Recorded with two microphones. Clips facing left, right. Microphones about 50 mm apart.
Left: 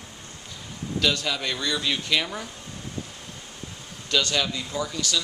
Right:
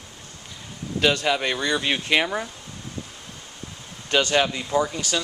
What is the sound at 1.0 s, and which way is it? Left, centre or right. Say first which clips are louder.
Speech: right 5 dB; right.